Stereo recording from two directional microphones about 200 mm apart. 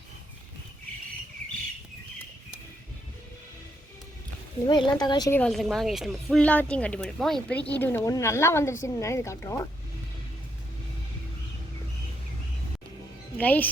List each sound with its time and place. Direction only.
4.6 s a woman's voice: 20° left (ahead or behind)
5.4 s speech: centre (ahead or behind)
13.4 s speech: 10° left (ahead or behind)